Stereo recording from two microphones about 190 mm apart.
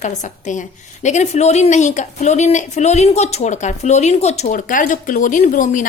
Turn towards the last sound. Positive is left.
turn(degrees=40)  # may be behind; listen again after turning